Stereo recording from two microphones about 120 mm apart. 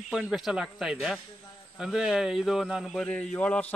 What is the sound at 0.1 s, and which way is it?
Speech, 5° right (ahead or behind).